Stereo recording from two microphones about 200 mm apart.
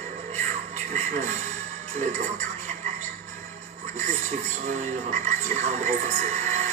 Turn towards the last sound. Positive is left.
turn(degrees=-35)  # may be behind; listen again after turning